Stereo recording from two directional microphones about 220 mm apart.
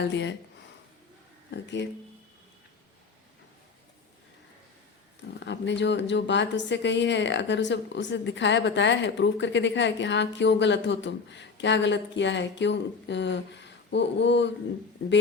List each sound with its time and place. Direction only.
0.0 s a woman's voice: 55° left (ahead or behind)
1.5 s speech: 50° left (ahead or behind)
5.5 s a woman's voice: 55° left (ahead or behind)